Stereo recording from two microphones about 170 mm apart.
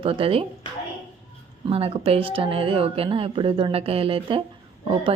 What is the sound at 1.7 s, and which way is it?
A woman's voice, 35° right (ahead or behind).